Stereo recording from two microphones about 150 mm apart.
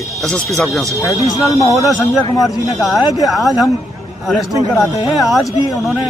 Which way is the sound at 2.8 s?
Centre (ahead or behind).